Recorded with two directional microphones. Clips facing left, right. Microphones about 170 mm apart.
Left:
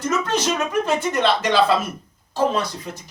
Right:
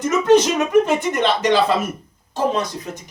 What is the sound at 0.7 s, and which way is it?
Speech, 15° right (ahead or behind).